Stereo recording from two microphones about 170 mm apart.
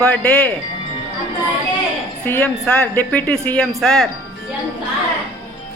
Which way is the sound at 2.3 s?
10° left (ahead or behind).